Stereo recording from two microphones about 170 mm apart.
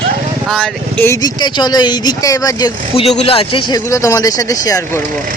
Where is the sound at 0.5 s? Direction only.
5° left (ahead or behind).